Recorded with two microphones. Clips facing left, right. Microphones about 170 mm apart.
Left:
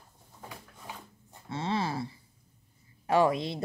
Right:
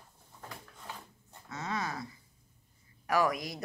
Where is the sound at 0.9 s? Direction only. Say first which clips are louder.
Left 1 dB; 15° left (ahead or behind).